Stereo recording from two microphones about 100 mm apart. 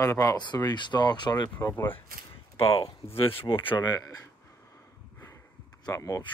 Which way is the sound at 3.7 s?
45° left (ahead or behind).